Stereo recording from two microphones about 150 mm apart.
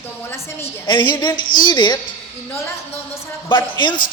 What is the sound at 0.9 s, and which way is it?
A man's voice, 30° left (ahead or behind).